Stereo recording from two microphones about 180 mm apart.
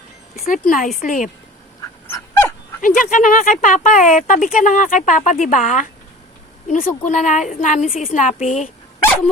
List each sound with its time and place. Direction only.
0.3 s speech: 50° left (ahead or behind)
2.0 s dog: 15° left (ahead or behind)
2.8 s speech: 50° left (ahead or behind)